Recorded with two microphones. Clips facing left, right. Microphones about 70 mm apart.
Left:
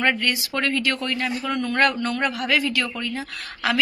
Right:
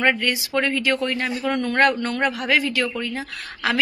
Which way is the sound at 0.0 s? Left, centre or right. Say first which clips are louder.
Right 2 dB; centre.